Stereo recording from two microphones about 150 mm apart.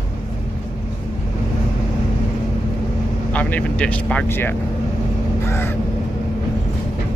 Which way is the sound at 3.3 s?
10° left (ahead or behind).